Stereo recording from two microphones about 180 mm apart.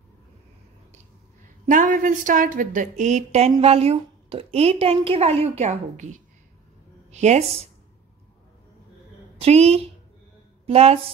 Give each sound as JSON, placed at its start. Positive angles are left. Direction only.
{"t": 1.7, "sound": "a woman's voice", "side_deg": -45}
{"t": 9.4, "sound": "a woman's voice", "side_deg": -35}